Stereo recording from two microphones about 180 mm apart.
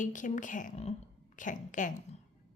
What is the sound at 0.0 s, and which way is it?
A woman's voice, 45° left (ahead or behind).